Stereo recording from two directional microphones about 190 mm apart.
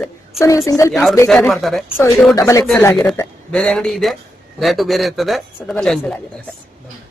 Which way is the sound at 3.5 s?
5° left (ahead or behind).